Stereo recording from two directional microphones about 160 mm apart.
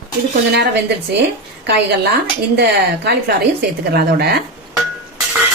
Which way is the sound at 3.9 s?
75° right (ahead or behind).